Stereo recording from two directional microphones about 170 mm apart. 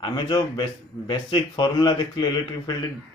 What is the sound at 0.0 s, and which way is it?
Speech, 25° left (ahead or behind).